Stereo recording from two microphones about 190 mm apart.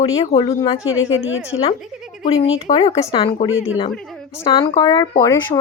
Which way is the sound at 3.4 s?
90° left.